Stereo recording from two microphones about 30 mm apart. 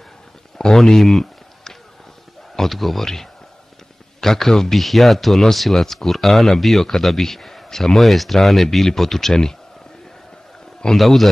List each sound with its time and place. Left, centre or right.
0.6 s a sound: left
2.5 s speech: centre
4.2 s speech: centre
4.7 s speech: centre
9.3 s speech: left
11.0 s speech: centre